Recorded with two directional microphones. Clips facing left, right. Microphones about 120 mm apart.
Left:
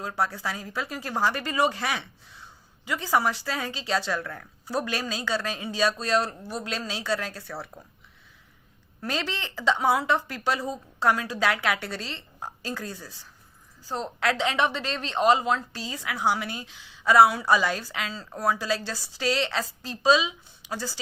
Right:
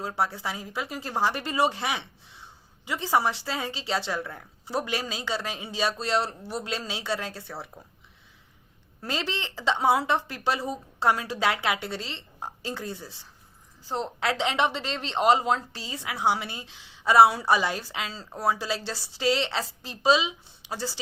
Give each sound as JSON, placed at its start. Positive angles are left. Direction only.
{"t": 0.0, "sound": "a woman's voice", "side_deg": -25}
{"t": 9.0, "sound": "a woman's voice", "side_deg": -25}